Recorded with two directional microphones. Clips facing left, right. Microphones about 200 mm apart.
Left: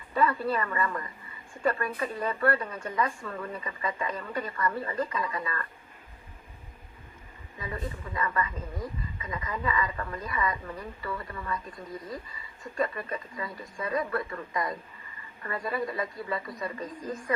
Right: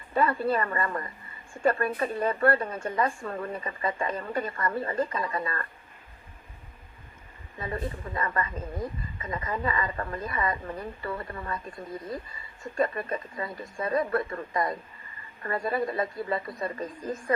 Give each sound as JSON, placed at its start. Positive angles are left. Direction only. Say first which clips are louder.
{"t": 0.3, "sound": "a woman's voice", "louder": "right 2 dB", "side_deg": -25}
{"t": 0.5, "sound": "a woman's voice", "louder": "right 2 dB", "side_deg": -35}
{"t": 4.6, "sound": "a woman's voice", "louder": "even", "side_deg": -30}
{"t": 7.6, "sound": "speech", "louder": "right 3 dB", "side_deg": -30}
{"t": 12.6, "sound": "a woman's voice", "louder": "right 3 dB", "side_deg": -30}